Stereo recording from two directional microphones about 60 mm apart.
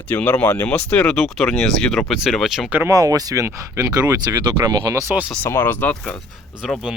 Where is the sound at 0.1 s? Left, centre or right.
Left.